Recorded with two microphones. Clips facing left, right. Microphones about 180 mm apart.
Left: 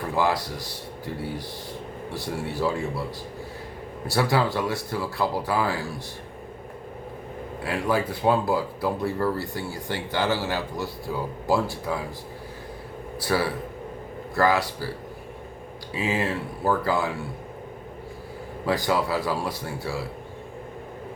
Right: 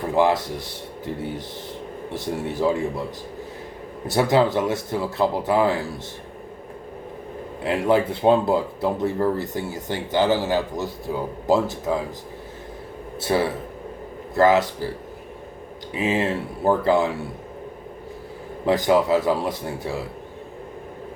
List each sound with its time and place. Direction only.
0.0 s speech: 20° right (ahead or behind)
4.0 s speech: 20° right (ahead or behind)
7.6 s speech: 25° right (ahead or behind)
13.1 s speech: 25° right (ahead or behind)
15.9 s speech: 20° right (ahead or behind)
18.6 s speech: 20° right (ahead or behind)